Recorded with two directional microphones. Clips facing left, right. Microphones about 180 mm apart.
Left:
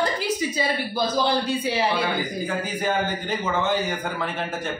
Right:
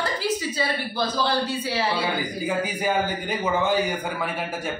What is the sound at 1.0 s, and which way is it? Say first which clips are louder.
Speech: left 1 dB; 15° left (ahead or behind).